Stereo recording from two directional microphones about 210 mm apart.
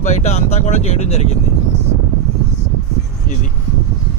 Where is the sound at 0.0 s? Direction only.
35° left (ahead or behind).